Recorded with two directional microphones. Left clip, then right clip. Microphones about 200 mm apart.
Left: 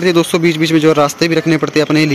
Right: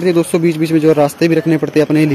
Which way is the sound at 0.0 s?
5° right (ahead or behind).